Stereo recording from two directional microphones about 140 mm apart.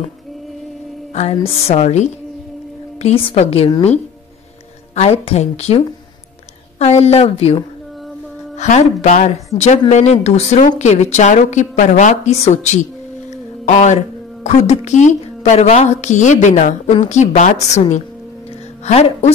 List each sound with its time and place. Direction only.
1.1 s a woman's voice: 50° left (ahead or behind)
4.9 s a woman's voice: 45° left (ahead or behind)
8.5 s a woman's voice: 55° left (ahead or behind)
13.3 s a sound: 55° left (ahead or behind)
14.4 s a woman's voice: 55° left (ahead or behind)
18.9 s a woman's voice: 45° left (ahead or behind)